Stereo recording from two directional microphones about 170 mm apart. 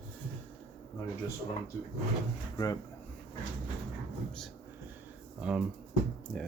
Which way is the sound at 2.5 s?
20° left (ahead or behind).